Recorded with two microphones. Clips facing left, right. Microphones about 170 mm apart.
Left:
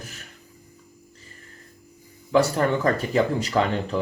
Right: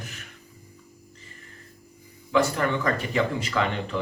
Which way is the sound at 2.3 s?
35° left (ahead or behind).